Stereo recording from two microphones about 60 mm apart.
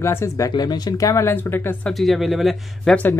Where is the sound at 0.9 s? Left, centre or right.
Left.